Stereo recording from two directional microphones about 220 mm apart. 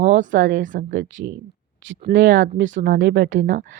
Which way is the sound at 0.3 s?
40° right (ahead or behind).